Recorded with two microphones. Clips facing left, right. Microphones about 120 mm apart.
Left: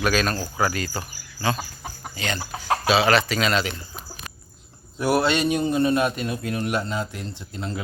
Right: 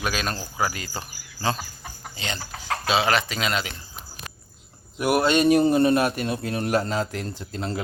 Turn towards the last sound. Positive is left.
turn(degrees=-35)  # may be behind; listen again after turning